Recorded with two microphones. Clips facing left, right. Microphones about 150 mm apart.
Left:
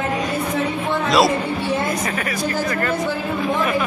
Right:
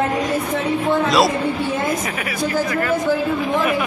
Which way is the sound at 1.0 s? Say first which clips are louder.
Left 3 dB; centre (ahead or behind).